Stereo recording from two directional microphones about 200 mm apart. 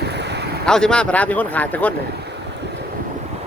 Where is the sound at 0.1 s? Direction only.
55° right (ahead or behind).